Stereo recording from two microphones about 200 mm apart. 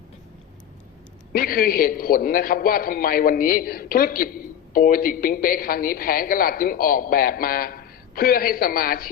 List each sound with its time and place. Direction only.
1.3 s a man's voice: 45° left (ahead or behind)